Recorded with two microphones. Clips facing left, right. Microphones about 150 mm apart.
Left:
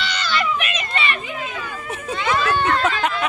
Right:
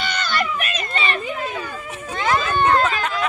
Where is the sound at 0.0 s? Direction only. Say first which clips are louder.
Even; 50° right (ahead or behind).